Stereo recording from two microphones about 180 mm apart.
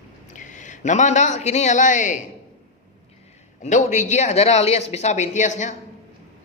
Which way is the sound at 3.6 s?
40° left (ahead or behind).